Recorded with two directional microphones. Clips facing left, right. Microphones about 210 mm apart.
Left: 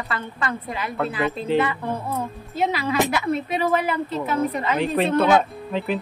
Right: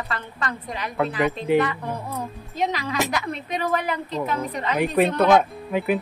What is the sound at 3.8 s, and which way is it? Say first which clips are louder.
Speech: left 2 dB; 5° left (ahead or behind).